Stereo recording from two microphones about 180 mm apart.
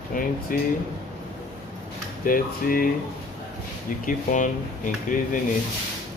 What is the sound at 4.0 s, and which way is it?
Speech, 45° left (ahead or behind).